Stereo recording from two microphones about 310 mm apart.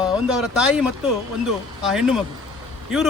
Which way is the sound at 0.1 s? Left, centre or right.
Centre.